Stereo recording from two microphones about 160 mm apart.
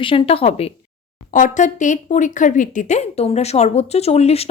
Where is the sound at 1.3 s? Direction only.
50° left (ahead or behind).